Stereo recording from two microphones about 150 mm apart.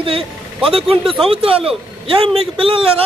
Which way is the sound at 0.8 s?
Centre (ahead or behind).